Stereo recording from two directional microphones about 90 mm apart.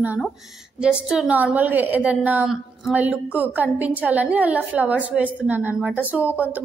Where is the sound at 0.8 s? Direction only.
10° right (ahead or behind).